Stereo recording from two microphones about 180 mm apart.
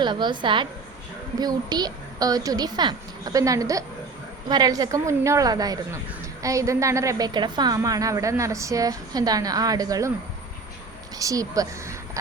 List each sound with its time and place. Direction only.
0.0 s a woman's voice: 25° right (ahead or behind)
11.2 s speech: 20° right (ahead or behind)